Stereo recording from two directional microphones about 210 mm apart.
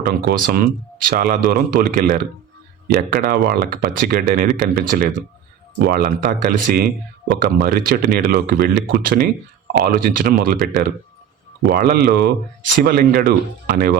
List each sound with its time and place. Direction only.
0.0 s speech: 45° right (ahead or behind)